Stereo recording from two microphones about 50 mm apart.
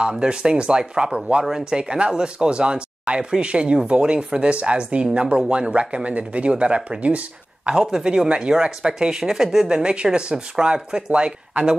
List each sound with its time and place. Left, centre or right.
0.0 s speech: centre